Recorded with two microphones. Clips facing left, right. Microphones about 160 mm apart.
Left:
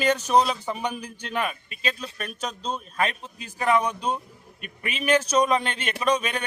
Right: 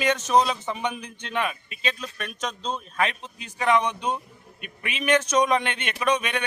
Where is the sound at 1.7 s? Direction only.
35° left (ahead or behind).